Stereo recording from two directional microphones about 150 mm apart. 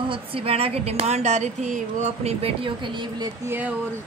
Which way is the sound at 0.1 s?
40° right (ahead or behind).